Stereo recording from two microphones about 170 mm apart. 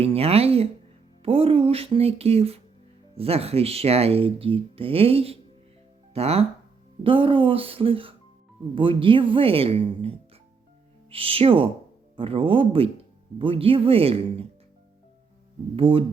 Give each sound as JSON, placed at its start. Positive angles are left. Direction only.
{"t": 0.0, "sound": "speech", "side_deg": -35}
{"t": 15.7, "sound": "speech", "side_deg": -30}